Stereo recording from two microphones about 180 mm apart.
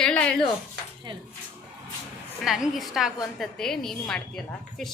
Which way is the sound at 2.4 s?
Centre (ahead or behind).